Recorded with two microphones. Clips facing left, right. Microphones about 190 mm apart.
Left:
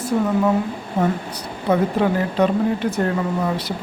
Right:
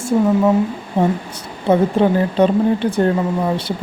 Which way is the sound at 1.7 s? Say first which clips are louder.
Right 4 dB; 25° right (ahead or behind).